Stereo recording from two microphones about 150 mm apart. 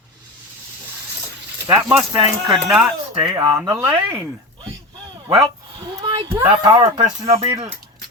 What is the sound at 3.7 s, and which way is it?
Speech, 20° right (ahead or behind).